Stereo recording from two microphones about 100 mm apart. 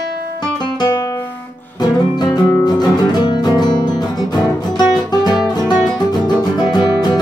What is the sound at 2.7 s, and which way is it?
Music, 45° left (ahead or behind).